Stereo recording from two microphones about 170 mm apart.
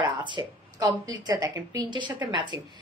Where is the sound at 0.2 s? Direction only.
25° right (ahead or behind).